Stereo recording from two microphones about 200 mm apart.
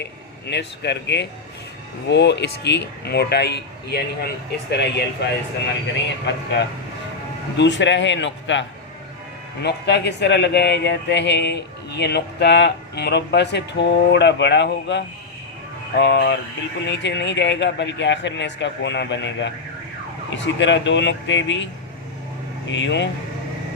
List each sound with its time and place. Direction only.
0.0 s speech: 55° left (ahead or behind)